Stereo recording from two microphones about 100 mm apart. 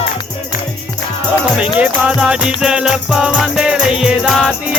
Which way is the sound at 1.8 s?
10° right (ahead or behind).